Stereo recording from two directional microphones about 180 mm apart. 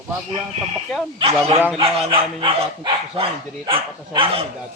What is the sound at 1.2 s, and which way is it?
Speech, 30° right (ahead or behind).